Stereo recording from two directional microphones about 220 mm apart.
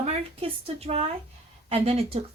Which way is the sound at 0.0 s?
25° right (ahead or behind).